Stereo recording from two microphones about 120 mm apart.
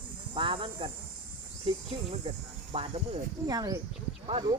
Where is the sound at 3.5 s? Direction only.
30° right (ahead or behind).